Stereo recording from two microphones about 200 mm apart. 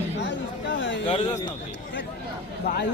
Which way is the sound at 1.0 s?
35° left (ahead or behind).